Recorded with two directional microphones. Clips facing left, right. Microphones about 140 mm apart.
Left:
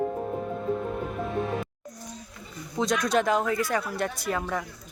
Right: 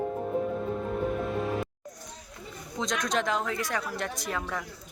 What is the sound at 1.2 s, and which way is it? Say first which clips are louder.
Music: left 1 dB; centre (ahead or behind).